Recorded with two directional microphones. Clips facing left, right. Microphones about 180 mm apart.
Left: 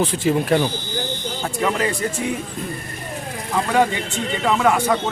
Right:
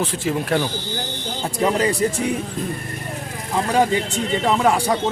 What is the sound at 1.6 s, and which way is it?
Speech, 35° right (ahead or behind).